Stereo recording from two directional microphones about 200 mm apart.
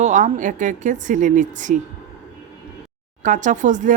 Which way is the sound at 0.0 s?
40° right (ahead or behind).